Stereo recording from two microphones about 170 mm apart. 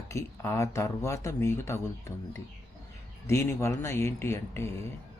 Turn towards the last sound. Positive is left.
turn(degrees=15)  # may be behind; listen again after turning